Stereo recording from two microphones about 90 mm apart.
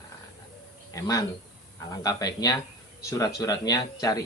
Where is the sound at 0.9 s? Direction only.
40° left (ahead or behind).